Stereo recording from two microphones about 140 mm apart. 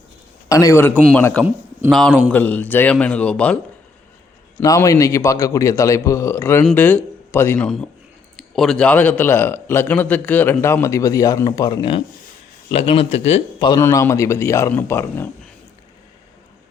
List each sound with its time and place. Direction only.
0.4 s a man's voice: 25° left (ahead or behind)
4.6 s a man's voice: 25° left (ahead or behind)
7.6 s a man's voice: 5° left (ahead or behind); by 13.4 s 50° left (ahead or behind)
13.7 s a man's voice: 20° left (ahead or behind)